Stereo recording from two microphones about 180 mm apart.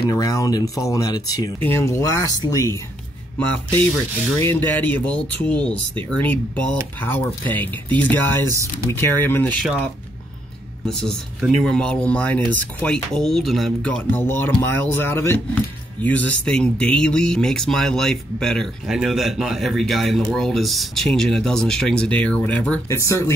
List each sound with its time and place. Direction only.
0.1 s speech: 20° left (ahead or behind)
4.4 s speech: 10° left (ahead or behind)
10.9 s speech: 5° left (ahead or behind)